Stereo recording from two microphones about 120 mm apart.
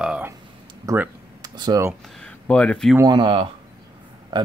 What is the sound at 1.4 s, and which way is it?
Speech, 35° right (ahead or behind).